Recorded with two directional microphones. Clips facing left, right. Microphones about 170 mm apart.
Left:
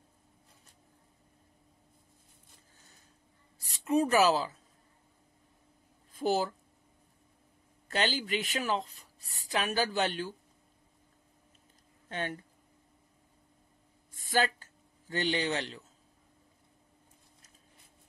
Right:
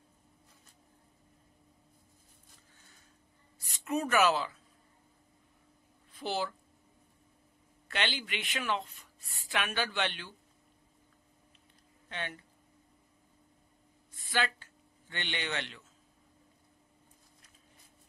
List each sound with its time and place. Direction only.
3.6 s speech: 30° left (ahead or behind)
6.1 s speech: 45° left (ahead or behind)
7.9 s speech: 40° left (ahead or behind)
12.1 s speech: 45° left (ahead or behind)
14.1 s a sound: 45° left (ahead or behind)